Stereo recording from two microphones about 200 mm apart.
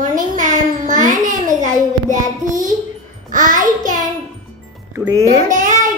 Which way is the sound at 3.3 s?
40° right (ahead or behind).